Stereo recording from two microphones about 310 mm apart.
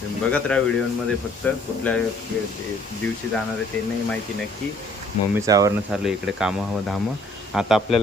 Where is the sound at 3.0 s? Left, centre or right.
Centre.